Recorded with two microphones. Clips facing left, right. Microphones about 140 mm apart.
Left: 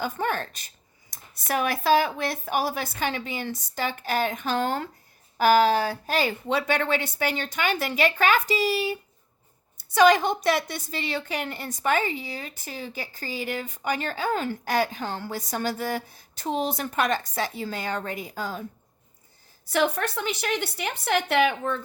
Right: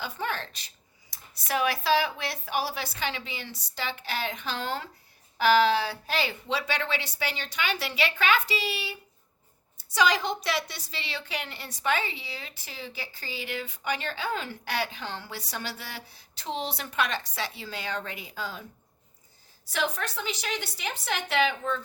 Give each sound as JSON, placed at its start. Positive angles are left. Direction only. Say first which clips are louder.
{"t": 0.0, "sound": "a woman's voice", "louder": "left 5 dB", "side_deg": 50}
{"t": 19.7, "sound": "a woman's voice", "louder": "left 6 dB", "side_deg": 55}